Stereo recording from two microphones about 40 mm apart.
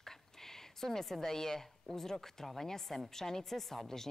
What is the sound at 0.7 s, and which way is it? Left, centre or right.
Speech, centre.